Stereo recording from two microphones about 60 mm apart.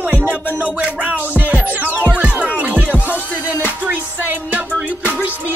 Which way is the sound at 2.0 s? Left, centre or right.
Right.